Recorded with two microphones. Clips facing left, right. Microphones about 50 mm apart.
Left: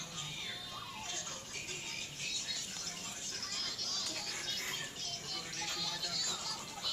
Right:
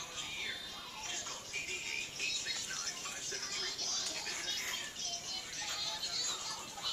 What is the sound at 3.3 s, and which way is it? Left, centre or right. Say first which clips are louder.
Music: even; centre.